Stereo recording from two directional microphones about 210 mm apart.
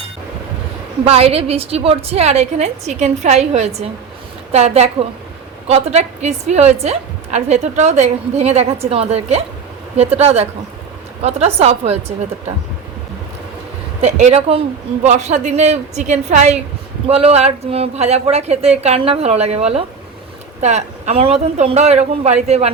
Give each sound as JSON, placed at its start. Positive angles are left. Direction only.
{"t": 1.0, "sound": "a woman's voice", "side_deg": -30}
{"t": 14.0, "sound": "a woman's voice", "side_deg": -30}